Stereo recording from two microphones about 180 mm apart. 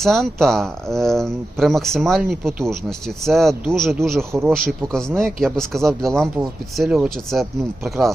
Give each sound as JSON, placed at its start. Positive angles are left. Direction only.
{"t": 0.0, "sound": "speech", "side_deg": 0}
{"t": 2.4, "sound": "speech", "side_deg": -15}
{"t": 3.2, "sound": "speech", "side_deg": 0}
{"t": 4.2, "sound": "speech", "side_deg": -15}
{"t": 4.8, "sound": "speech", "side_deg": 5}